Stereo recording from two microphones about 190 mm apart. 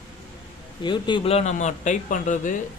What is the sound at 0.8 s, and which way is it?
Speech, 25° left (ahead or behind).